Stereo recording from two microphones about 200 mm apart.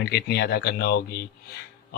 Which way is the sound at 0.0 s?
55° left (ahead or behind).